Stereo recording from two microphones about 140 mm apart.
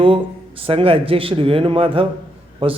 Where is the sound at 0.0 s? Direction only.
40° right (ahead or behind).